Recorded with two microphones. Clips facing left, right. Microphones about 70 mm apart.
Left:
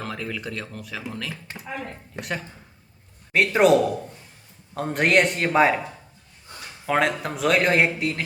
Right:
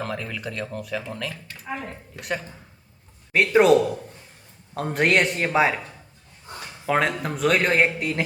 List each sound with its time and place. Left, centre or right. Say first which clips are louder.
0.0 s speech: right 1 dB; centre
1.6 s a woman's voice: right 2 dB; centre
6.8 s speech: even; centre